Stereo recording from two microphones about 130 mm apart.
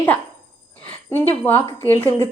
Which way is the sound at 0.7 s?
15° left (ahead or behind).